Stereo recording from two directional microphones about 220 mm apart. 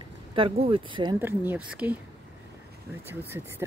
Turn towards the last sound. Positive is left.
turn(degrees=-10)  # may be behind; listen again after turning